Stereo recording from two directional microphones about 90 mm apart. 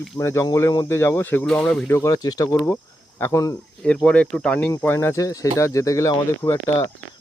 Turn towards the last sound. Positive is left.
turn(degrees=35)  # may be behind; listen again after turning